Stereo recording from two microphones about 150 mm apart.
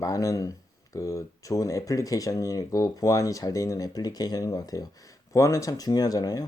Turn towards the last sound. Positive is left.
turn(degrees=25)  # may be behind; listen again after turning